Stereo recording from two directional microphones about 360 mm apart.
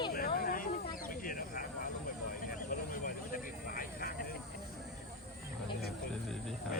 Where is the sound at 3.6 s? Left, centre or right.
Left.